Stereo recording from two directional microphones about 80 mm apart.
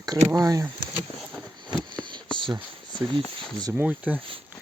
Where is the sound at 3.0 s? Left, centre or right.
Right.